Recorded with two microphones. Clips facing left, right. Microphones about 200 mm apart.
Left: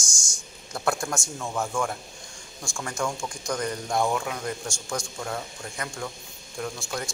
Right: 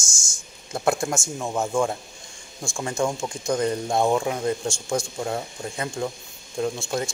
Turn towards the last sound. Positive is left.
turn(degrees=-25)  # may be behind; listen again after turning